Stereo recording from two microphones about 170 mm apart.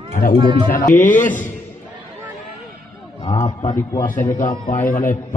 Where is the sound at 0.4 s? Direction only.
25° right (ahead or behind).